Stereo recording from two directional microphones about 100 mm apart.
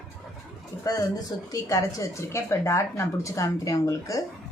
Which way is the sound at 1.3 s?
40° left (ahead or behind).